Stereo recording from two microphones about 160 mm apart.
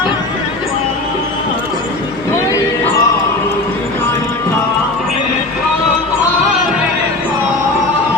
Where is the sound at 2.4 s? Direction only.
20° left (ahead or behind).